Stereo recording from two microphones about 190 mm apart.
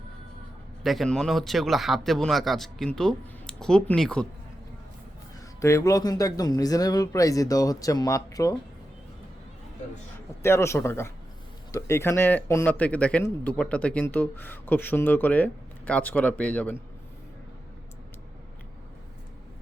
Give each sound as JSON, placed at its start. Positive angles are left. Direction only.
{"t": 0.8, "sound": "a man's voice", "side_deg": 0}
{"t": 5.5, "sound": "speech", "side_deg": 15}
{"t": 10.4, "sound": "speech", "side_deg": 15}